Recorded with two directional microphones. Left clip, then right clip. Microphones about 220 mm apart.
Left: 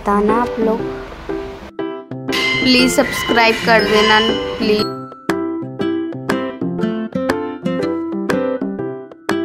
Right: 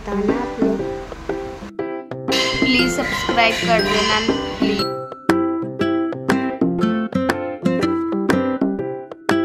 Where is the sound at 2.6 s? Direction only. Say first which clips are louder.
Left 5 dB; 25° left (ahead or behind).